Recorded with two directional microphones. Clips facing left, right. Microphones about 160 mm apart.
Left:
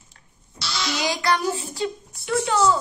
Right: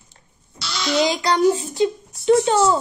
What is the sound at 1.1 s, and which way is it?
A woman's voice, 20° right (ahead or behind).